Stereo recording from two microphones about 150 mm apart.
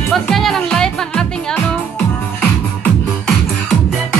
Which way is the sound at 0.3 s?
Centre (ahead or behind).